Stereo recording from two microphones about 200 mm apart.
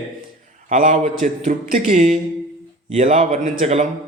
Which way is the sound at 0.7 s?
40° right (ahead or behind).